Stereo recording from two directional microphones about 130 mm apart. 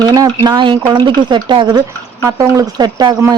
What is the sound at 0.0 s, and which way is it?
A woman's voice, 35° right (ahead or behind).